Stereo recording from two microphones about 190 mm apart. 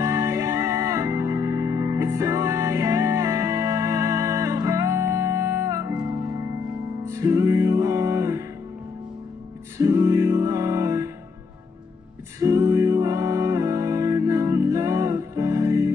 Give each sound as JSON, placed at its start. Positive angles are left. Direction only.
{"t": 0.0, "sound": "music", "side_deg": -15}
{"t": 7.1, "sound": "music", "side_deg": -15}
{"t": 9.8, "sound": "music", "side_deg": -15}
{"t": 12.4, "sound": "music", "side_deg": -15}